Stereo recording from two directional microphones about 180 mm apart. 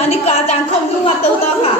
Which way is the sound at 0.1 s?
35° left (ahead or behind).